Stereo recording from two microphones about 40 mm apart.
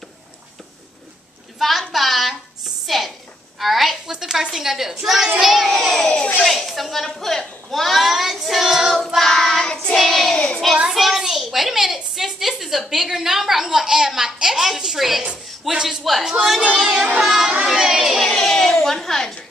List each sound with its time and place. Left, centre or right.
1.6 s a sound: centre
2.9 s a woman's voice: centre
4.1 s a woman's voice: centre
5.7 s a woman's voice: centre
9.2 s child singing: centre
10.3 s child singing: left
10.9 s a child's voice: centre
15.7 s a woman's voice: centre
16.0 s a woman's voice: centre
17.7 s a sound: centre
18.3 s a sound: centre
18.9 s a woman's voice: centre